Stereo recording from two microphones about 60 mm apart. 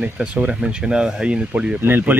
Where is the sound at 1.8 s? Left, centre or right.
Right.